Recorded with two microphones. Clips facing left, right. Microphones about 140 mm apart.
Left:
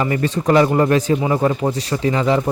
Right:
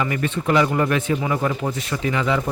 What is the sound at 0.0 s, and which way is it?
Speech, 30° left (ahead or behind).